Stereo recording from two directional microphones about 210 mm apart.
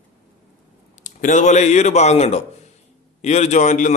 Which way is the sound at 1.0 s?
35° left (ahead or behind).